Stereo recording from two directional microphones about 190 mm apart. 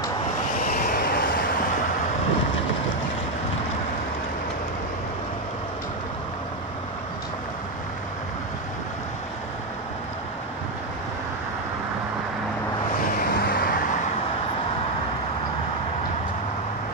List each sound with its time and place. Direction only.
0.7 s vehicle: 50° left (ahead or behind)
13.0 s vehicle: 50° left (ahead or behind)